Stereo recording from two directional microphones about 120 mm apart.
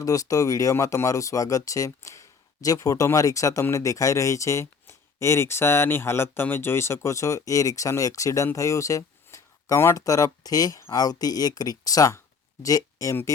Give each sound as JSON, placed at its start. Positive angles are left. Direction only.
{"t": 0.0, "sound": "speech", "side_deg": 30}